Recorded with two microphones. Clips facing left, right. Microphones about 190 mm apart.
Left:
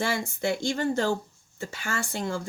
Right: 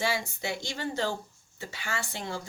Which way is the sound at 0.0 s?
50° left (ahead or behind).